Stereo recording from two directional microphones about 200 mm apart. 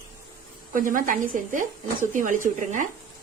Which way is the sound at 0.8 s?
40° right (ahead or behind).